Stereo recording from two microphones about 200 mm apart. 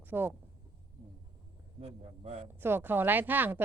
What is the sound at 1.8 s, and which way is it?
Speech, 30° right (ahead or behind).